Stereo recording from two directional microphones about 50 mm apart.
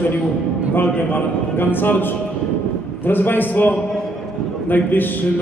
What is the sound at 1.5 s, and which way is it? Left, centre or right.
A man's voice, left.